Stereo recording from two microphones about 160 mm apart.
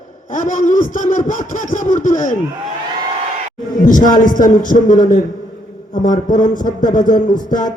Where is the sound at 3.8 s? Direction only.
55° left (ahead or behind).